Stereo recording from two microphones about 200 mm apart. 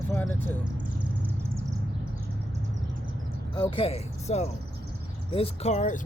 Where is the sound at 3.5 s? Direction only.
25° left (ahead or behind).